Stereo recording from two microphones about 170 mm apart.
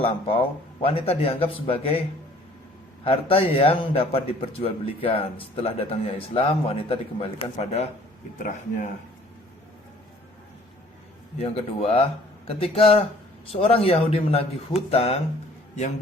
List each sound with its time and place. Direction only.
0.0 s a man's voice: 35° left (ahead or behind)
3.0 s a man's voice: 35° left (ahead or behind)
11.3 s a man's voice: 35° left (ahead or behind)